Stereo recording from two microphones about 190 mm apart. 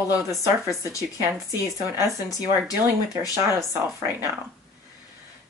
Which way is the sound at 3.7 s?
15° right (ahead or behind).